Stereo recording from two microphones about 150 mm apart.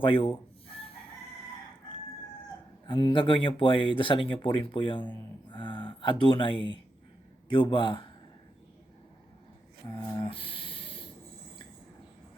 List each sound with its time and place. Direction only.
0.0 s speech: 35° left (ahead or behind)
2.8 s speech: 30° left (ahead or behind)
10.2 s a sound: 35° left (ahead or behind)